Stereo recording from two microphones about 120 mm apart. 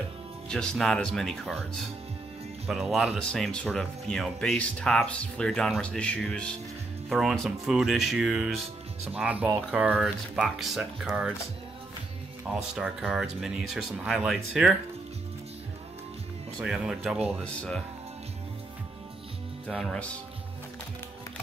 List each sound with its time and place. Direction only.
0.5 s speech: 5° left (ahead or behind)
2.7 s speech: centre (ahead or behind)
12.4 s speech: 5° right (ahead or behind)
16.5 s speech: 5° right (ahead or behind)
19.7 s speech: 5° left (ahead or behind)